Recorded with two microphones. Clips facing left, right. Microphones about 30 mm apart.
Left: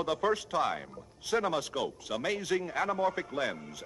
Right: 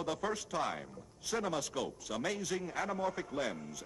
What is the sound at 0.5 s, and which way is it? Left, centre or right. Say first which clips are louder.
A man's voice: left 6 dB; left.